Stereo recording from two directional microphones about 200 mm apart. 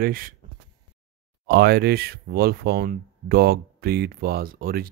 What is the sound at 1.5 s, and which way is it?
Speech, 50° right (ahead or behind).